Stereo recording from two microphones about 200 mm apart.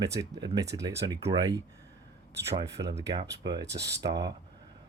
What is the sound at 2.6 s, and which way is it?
Speech, 60° right (ahead or behind).